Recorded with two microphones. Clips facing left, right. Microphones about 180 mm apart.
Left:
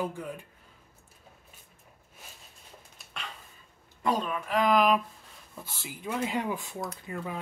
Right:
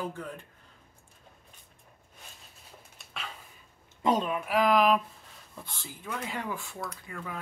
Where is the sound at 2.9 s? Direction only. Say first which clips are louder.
Right 1 dB; centre (ahead or behind).